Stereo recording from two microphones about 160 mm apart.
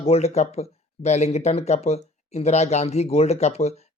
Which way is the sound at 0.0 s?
40° left (ahead or behind).